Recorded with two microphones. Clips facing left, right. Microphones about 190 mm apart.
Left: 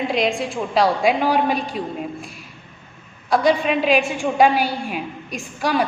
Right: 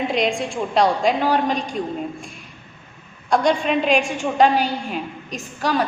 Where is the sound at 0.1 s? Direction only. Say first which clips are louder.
Even; centre (ahead or behind).